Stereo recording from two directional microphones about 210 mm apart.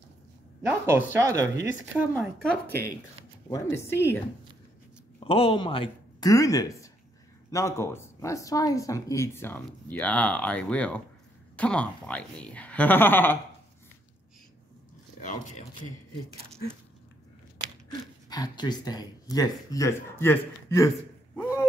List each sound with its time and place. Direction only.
0.6 s speech: 10° right (ahead or behind)
2.1 s speech: 5° left (ahead or behind)
5.2 s speech: 25° left (ahead or behind); by 13.4 s 10° left (ahead or behind)
15.1 s speech: 35° left (ahead or behind)
18.3 s speech: 20° left (ahead or behind)
21.4 s a sound: 10° left (ahead or behind)